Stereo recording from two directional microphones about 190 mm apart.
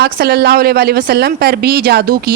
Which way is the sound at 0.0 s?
55° right (ahead or behind).